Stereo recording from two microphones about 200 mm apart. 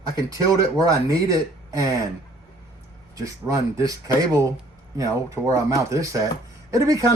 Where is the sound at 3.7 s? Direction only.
15° right (ahead or behind).